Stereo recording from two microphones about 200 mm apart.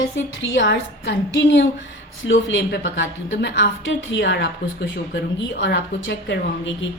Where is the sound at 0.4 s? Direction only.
65° left (ahead or behind).